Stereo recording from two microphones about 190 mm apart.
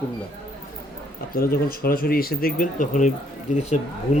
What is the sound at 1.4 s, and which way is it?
Speech, 50° left (ahead or behind).